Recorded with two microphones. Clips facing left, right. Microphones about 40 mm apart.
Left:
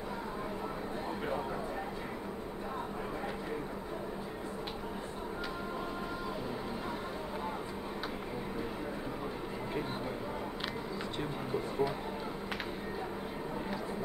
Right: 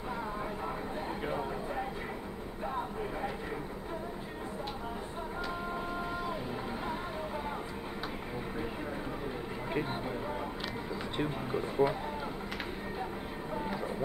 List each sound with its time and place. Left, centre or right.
11.1 s speech: right